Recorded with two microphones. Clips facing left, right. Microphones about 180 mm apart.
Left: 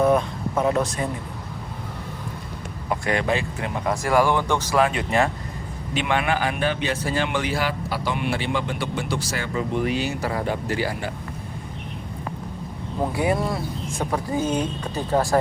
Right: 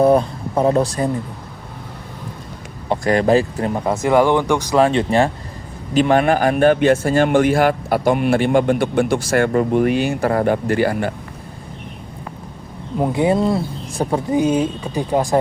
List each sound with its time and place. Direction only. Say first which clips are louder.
0.0 s speech: right 5 dB; 35° right (ahead or behind)
2.9 s speech: right 8 dB; 40° right (ahead or behind)
3.9 s speech: right 5 dB; 20° right (ahead or behind)
4.8 s speech: right 6 dB; 30° right (ahead or behind)
5.9 s a man's voice: right 9 dB; 40° right (ahead or behind); by 11.1 s 55° right (ahead or behind)
13.0 s speech: right 6 dB; 25° right (ahead or behind)
14.3 s speech: right 8 dB; 15° right (ahead or behind)